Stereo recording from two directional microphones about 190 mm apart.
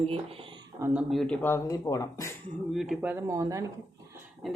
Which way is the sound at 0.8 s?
10° right (ahead or behind).